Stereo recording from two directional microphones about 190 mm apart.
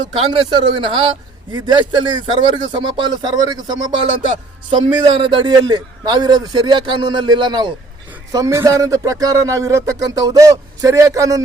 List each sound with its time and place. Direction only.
0.1 s a man's voice: 25° right (ahead or behind)
4.8 s a man's voice: 30° right (ahead or behind)